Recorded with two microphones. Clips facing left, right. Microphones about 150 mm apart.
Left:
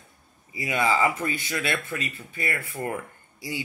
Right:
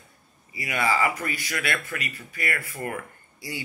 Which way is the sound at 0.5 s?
20° left (ahead or behind).